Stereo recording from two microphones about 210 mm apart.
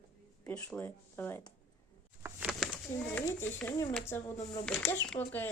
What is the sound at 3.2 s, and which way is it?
Speech, 10° left (ahead or behind).